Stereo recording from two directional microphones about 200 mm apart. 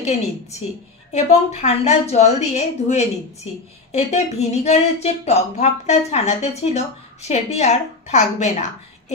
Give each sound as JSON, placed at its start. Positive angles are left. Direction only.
{"t": 0.0, "sound": "speech", "side_deg": 35}